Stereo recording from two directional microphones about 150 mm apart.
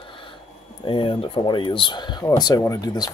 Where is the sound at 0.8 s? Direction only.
35° left (ahead or behind).